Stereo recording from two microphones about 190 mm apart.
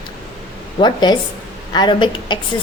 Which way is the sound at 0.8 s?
20° left (ahead or behind).